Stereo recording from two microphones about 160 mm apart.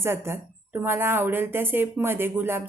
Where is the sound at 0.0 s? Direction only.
15° right (ahead or behind).